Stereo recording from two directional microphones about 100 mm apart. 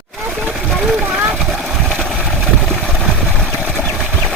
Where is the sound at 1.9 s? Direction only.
5° left (ahead or behind).